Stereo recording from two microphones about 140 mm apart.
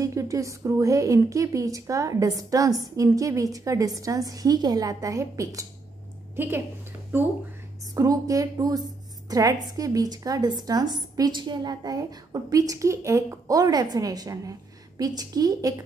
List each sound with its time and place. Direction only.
0.0 s a woman's voice: 20° right (ahead or behind)
7.8 s a woman's voice: 25° right (ahead or behind)